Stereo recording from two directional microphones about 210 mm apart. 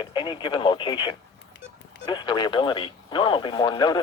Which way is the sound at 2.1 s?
20° left (ahead or behind).